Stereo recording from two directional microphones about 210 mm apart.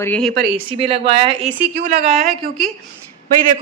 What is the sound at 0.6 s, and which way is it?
Speech, 25° right (ahead or behind).